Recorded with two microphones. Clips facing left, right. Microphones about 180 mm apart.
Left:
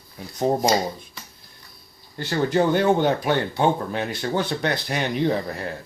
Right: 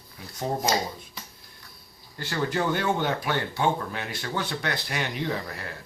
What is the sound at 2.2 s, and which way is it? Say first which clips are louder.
Speech: left 7 dB; 20° left (ahead or behind).